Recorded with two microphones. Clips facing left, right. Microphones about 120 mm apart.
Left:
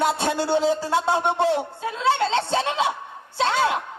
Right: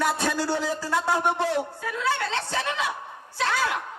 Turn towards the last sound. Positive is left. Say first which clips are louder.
# left 5 dB
turn(degrees=25)  # may be behind; listen again after turning